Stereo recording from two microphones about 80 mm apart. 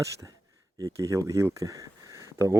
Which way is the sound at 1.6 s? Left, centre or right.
Right.